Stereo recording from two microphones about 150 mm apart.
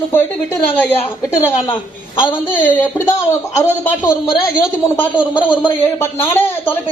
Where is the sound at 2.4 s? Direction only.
15° left (ahead or behind).